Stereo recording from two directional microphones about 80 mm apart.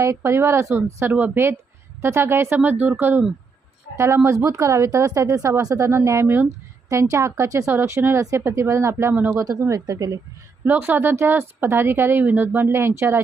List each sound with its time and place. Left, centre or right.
0.0 s speech: right
3.9 s speech: right
6.8 s speech: right
9.8 s speech: right
10.7 s speech: right